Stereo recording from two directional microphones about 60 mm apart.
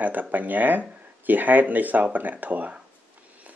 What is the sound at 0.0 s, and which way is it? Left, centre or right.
Speech, right.